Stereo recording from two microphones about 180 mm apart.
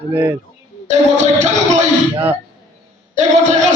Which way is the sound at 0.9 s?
40° right (ahead or behind).